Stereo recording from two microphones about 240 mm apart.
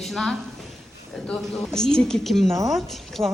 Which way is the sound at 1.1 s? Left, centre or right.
Centre.